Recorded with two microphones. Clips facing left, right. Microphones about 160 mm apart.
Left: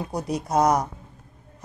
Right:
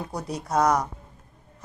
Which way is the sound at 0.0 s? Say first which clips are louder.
Left 4 dB; 15° left (ahead or behind).